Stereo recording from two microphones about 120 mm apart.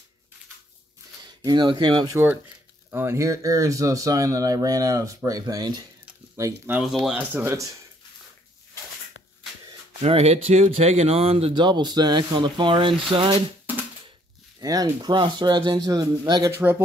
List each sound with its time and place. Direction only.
1.4 s speech: 35° right (ahead or behind)
2.9 s speech: 20° right (ahead or behind)
7.1 s speech: 10° right (ahead or behind)
7.5 s speech: 25° right (ahead or behind)
9.9 s speech: 55° right (ahead or behind)
11.5 s speech: 40° right (ahead or behind)
14.6 s speech: 30° right (ahead or behind)
16.4 s speech: 20° right (ahead or behind)